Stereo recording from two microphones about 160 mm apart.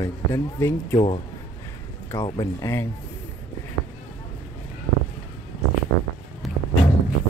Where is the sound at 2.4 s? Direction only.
20° left (ahead or behind).